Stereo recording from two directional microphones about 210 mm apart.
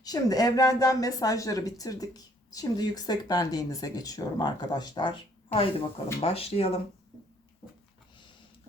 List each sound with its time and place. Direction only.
0.0 s speech: 20° left (ahead or behind)